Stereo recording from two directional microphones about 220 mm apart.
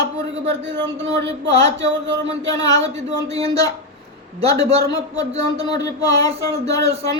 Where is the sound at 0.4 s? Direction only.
55° right (ahead or behind).